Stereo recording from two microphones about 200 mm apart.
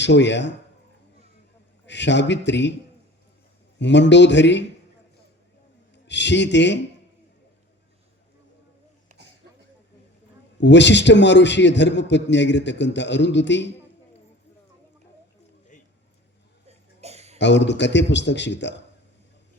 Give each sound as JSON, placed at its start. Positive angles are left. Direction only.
{"t": 0.0, "sound": "a man's voice", "side_deg": 60}
{"t": 1.9, "sound": "a man's voice", "side_deg": 60}
{"t": 3.8, "sound": "a man's voice", "side_deg": 60}
{"t": 5.9, "sound": "speech", "side_deg": 60}
{"t": 10.6, "sound": "a man's voice", "side_deg": 60}
{"t": 16.6, "sound": "cough", "side_deg": -30}
{"t": 17.3, "sound": "a man's voice", "side_deg": 60}